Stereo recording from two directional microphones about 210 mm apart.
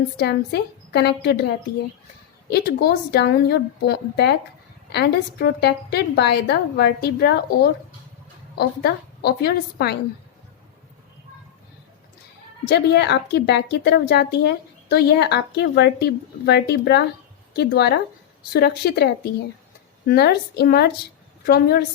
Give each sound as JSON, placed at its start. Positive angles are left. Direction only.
{"t": 0.2, "sound": "a woman's voice", "side_deg": 50}
{"t": 2.5, "sound": "a woman's voice", "side_deg": 50}
{"t": 12.6, "sound": "a woman's voice", "side_deg": 50}
{"t": 20.1, "sound": "a woman's voice", "side_deg": 50}